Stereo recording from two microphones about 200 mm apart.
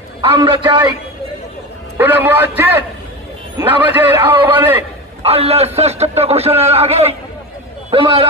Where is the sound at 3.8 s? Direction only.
10° right (ahead or behind).